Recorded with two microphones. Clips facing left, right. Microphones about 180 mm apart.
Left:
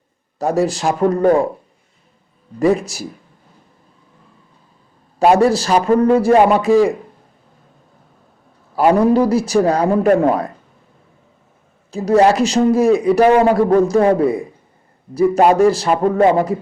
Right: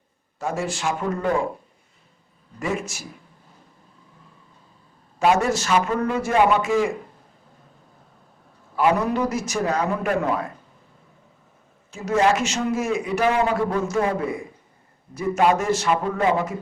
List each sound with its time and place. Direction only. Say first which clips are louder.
0.3 s a man's voice: left 10 dB; 35° left (ahead or behind)
2.6 s a man's voice: left 12 dB; 35° left (ahead or behind)
5.2 s a man's voice: left 7 dB; 35° left (ahead or behind)
8.7 s a man's voice: left 8 dB; 35° left (ahead or behind)
11.9 s a man's voice: left 7 dB; 35° left (ahead or behind)
16.0 s speech: left 13 dB; 50° left (ahead or behind)